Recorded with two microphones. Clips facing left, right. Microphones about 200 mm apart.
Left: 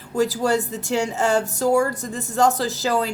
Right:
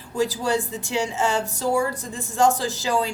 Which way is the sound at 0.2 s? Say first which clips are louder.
Left 3 dB; 40° left (ahead or behind).